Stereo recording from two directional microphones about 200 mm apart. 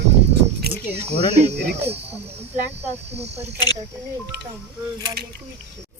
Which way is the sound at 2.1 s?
30° right (ahead or behind).